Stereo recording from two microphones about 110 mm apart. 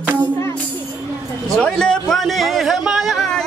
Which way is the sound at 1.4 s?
5° left (ahead or behind).